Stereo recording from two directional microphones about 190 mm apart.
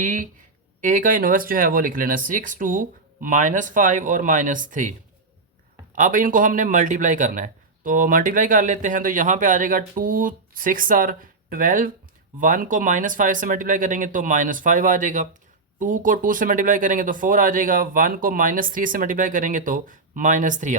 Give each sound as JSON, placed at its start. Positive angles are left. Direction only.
{"t": 0.0, "sound": "a man's voice", "side_deg": -40}